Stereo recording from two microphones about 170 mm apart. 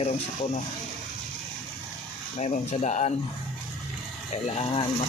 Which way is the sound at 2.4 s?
45° left (ahead or behind).